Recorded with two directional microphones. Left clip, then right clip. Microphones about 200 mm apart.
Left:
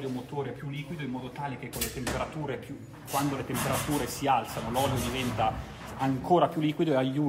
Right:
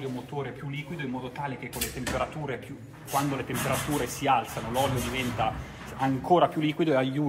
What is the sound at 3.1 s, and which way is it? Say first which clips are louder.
Speech: right 2 dB; 5° left (ahead or behind).